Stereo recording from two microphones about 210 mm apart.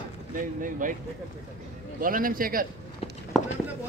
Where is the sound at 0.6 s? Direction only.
40° right (ahead or behind).